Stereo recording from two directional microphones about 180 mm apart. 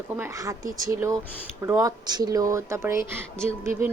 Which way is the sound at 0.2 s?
15° right (ahead or behind).